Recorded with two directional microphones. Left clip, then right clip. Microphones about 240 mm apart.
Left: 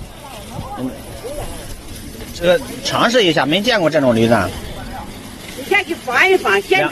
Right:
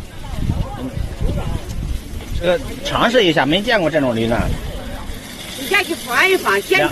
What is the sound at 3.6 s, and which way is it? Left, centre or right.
Speech, centre.